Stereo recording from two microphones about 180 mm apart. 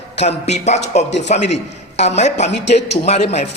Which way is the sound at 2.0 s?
40° left (ahead or behind).